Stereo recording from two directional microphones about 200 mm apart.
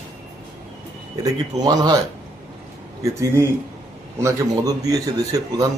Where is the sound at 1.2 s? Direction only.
20° right (ahead or behind).